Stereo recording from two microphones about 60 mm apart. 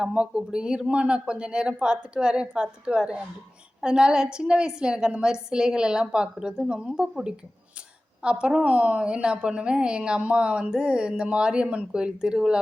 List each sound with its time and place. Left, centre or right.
0.0 s a woman's voice: centre